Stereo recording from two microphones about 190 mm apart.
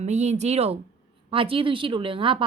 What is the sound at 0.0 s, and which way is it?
A woman's voice, 35° right (ahead or behind).